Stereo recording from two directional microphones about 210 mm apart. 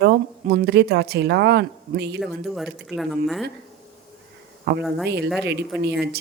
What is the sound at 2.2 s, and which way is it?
Speech, centre (ahead or behind).